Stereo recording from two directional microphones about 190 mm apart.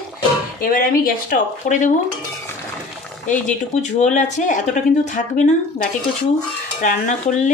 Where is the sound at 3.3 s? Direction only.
40° left (ahead or behind).